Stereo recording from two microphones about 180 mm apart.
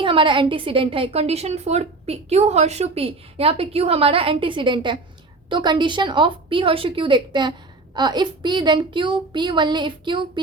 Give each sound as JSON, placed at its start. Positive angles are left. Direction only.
{"t": 0.0, "sound": "a woman's voice", "side_deg": -30}